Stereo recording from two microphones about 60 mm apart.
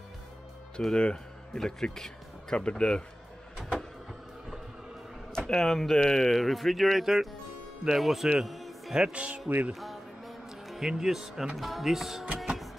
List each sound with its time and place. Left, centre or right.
0.7 s speech: centre
5.3 s speech: centre
8.3 s music: centre
8.9 s speech: centre
9.7 s music: centre
11.5 s speech: centre